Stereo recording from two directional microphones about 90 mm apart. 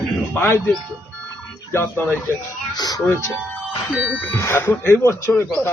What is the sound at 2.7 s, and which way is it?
Speech, 50° left (ahead or behind).